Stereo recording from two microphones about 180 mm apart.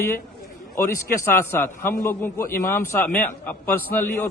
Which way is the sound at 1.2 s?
15° left (ahead or behind).